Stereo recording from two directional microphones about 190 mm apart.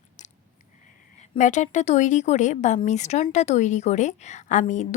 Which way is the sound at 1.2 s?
40° left (ahead or behind).